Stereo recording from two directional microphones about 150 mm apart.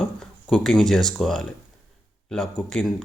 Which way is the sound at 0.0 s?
5° left (ahead or behind).